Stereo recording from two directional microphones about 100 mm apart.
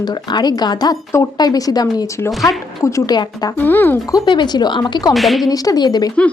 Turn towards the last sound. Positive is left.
turn(degrees=45)  # may be behind; listen again after turning